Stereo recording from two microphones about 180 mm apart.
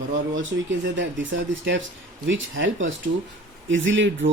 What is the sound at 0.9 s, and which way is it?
Speech, 90° right.